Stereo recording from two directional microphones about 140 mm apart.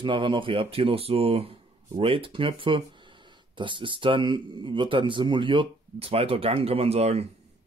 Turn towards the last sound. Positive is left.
turn(degrees=-50)  # may be behind; listen again after turning